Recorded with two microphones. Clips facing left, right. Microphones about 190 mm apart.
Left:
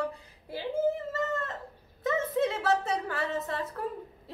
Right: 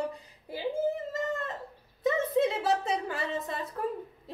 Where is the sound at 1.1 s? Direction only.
15° right (ahead or behind).